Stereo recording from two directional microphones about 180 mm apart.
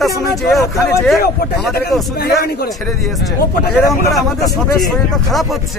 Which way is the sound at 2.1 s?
60° left (ahead or behind).